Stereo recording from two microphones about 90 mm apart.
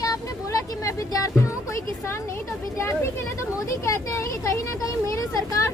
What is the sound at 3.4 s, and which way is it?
Speech, 35° left (ahead or behind).